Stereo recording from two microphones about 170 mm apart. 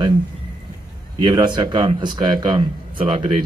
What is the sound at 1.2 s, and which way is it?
Speech, 25° right (ahead or behind).